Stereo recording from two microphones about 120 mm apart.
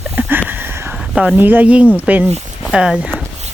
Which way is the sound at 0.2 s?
15° right (ahead or behind).